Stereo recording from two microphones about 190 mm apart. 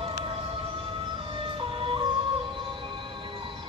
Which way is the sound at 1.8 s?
30° right (ahead or behind).